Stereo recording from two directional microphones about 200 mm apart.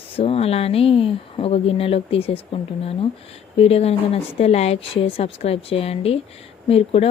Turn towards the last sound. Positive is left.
turn(degrees=30)  # may be behind; listen again after turning